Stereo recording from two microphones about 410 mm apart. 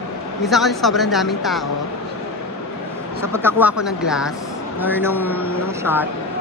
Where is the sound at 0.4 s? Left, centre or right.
Centre.